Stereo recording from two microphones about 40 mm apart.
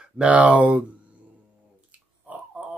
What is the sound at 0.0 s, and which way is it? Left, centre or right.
Speech, right.